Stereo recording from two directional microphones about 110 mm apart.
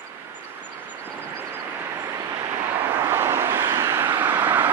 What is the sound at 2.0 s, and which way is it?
Vehicle, 25° right (ahead or behind).